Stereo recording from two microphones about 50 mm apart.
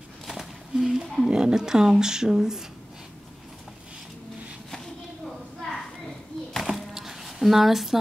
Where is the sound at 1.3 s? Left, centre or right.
Centre.